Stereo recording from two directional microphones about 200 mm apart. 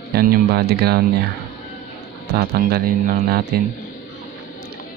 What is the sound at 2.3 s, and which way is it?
Speech, 50° right (ahead or behind).